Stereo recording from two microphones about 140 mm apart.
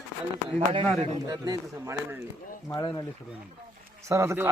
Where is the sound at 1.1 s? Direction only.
25° right (ahead or behind).